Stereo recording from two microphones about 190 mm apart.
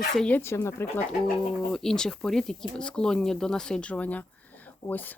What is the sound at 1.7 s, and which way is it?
Speech, 5° left (ahead or behind).